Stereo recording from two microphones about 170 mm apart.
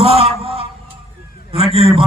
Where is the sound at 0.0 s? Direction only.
35° right (ahead or behind).